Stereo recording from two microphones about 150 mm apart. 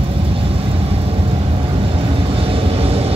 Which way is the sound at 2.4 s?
40° right (ahead or behind).